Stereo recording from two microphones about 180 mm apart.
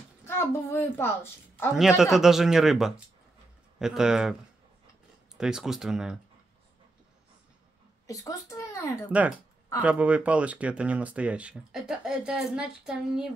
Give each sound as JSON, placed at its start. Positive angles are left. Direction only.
{"t": 0.2, "sound": "a woman's voice", "side_deg": 15}
{"t": 1.8, "sound": "speech", "side_deg": 0}
{"t": 5.4, "sound": "speech", "side_deg": -5}
{"t": 8.1, "sound": "a child's voice", "side_deg": 20}
{"t": 9.8, "sound": "speech", "side_deg": -5}